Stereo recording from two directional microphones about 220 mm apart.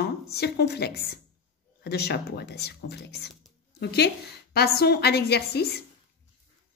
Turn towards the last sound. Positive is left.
turn(degrees=45)  # may be behind; listen again after turning